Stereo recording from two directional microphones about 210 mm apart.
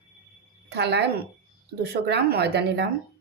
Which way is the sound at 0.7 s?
50° right (ahead or behind).